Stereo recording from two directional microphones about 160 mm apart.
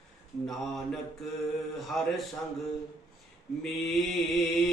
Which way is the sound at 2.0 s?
Centre (ahead or behind).